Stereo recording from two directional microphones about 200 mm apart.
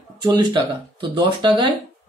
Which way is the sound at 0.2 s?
20° right (ahead or behind).